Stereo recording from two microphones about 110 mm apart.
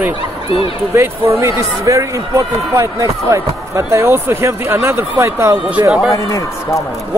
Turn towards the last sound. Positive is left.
turn(degrees=30)  # may be behind; listen again after turning